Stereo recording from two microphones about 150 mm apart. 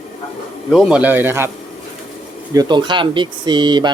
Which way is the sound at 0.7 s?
5° right (ahead or behind).